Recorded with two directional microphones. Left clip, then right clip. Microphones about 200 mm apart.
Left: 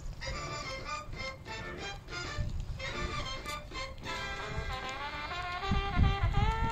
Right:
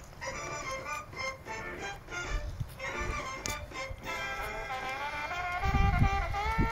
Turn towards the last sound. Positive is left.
turn(degrees=-45)  # may be behind; listen again after turning